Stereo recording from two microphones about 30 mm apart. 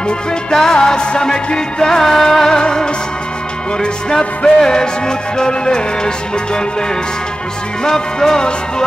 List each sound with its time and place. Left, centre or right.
0.3 s music: centre
2.5 s music: left
4.6 s music: left
7.8 s music: left